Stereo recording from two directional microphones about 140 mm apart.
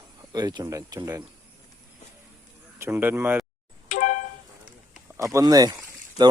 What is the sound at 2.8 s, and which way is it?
Speech, 15° right (ahead or behind).